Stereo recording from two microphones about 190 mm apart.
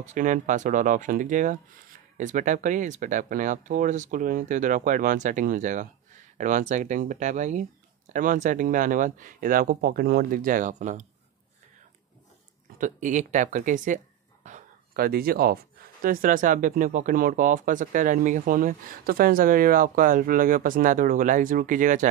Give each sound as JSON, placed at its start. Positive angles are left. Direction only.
{"t": 0.0, "sound": "speech", "side_deg": -40}
{"t": 12.7, "sound": "speech", "side_deg": -40}